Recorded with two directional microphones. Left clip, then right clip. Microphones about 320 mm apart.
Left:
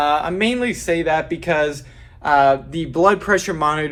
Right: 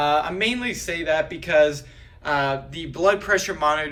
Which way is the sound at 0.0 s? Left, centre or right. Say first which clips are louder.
Left 3 dB; centre.